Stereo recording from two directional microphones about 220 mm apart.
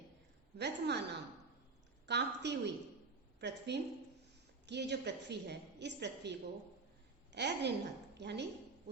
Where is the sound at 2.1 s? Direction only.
50° right (ahead or behind).